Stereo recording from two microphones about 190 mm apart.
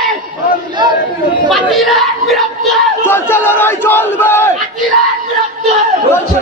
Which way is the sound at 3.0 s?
10° left (ahead or behind).